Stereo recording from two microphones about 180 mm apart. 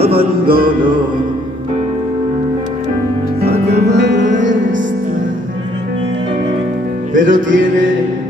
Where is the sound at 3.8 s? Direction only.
70° right (ahead or behind).